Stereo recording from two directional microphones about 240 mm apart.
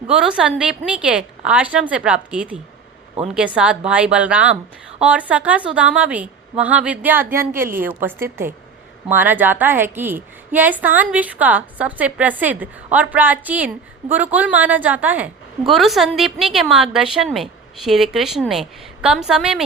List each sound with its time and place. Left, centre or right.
0.1 s a woman's voice: centre